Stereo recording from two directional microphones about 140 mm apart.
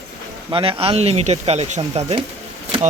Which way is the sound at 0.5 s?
40° right (ahead or behind).